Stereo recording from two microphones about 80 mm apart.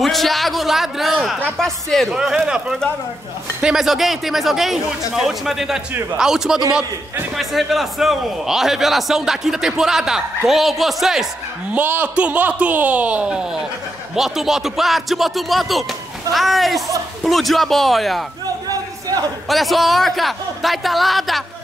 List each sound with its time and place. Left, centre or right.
0.0 s a man's voice: centre
2.1 s a man's voice: centre
11.7 s a man's voice: right; by 18.2 s centre
18.7 s a sound: right
19.5 s a man's voice: centre